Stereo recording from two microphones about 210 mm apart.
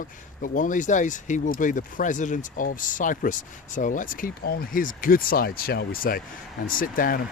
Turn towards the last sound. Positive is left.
turn(degrees=45)  # may be behind; listen again after turning